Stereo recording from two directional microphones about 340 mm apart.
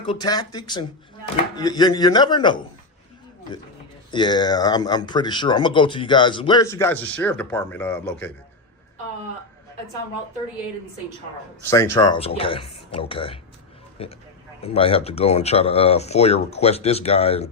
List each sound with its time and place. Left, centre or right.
0.0 s speech: centre
4.1 s speech: centre
11.6 s speech: centre